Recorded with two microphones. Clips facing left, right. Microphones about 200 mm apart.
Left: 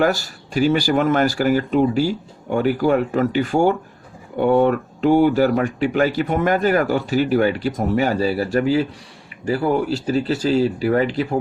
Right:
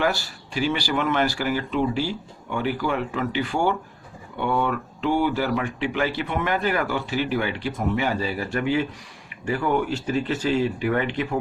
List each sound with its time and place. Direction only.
0.0 s speech: 45° left (ahead or behind)